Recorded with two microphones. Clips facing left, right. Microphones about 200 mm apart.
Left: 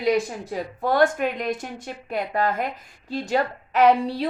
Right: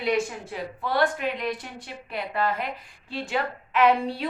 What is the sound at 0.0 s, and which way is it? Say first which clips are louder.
A woman's voice: left 4 dB; 40° left (ahead or behind).